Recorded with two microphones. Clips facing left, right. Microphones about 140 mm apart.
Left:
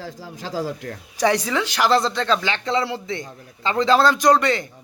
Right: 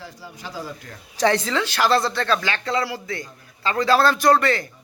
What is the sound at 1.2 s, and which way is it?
Speech, 15° left (ahead or behind).